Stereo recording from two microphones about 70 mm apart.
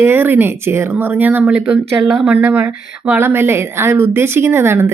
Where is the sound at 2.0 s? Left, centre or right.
Centre.